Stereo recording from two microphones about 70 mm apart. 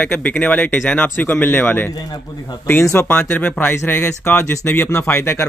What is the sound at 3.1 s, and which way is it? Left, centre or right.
Speech, left.